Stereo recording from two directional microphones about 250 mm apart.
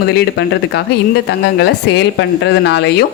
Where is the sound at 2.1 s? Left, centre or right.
Left.